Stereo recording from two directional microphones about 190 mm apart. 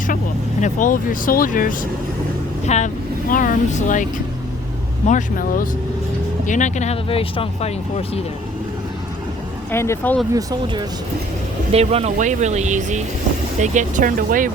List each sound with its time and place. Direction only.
0.6 s speech: 45° left (ahead or behind)
5.0 s speech: 45° left (ahead or behind)
9.7 s speech: 15° left (ahead or behind)
10.3 s speech: 20° right (ahead or behind)
11.7 s speech: 35° right (ahead or behind)